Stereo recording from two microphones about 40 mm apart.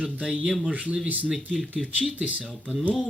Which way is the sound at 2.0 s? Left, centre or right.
Centre.